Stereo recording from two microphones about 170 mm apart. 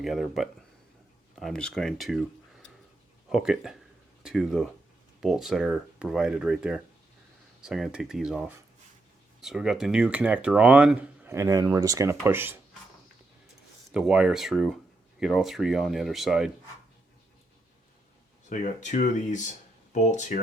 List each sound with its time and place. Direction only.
0.0 s speech: centre (ahead or behind)
13.9 s speech: 5° right (ahead or behind)
18.4 s speech: 45° left (ahead or behind)